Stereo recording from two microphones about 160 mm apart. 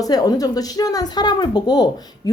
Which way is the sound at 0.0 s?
25° left (ahead or behind).